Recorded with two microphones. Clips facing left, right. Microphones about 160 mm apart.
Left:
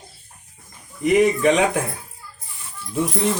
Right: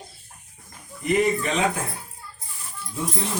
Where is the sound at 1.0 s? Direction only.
75° left (ahead or behind).